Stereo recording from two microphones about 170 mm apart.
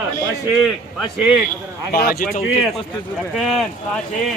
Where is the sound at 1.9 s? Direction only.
60° left (ahead or behind).